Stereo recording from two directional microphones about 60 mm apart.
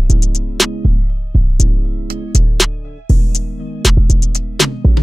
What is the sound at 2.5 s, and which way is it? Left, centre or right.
Music, centre.